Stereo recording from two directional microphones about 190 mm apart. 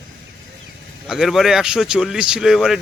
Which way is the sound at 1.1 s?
Centre (ahead or behind).